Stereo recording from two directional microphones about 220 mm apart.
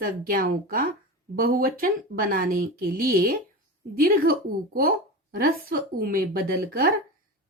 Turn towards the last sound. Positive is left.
turn(degrees=-40)  # may be behind; listen again after turning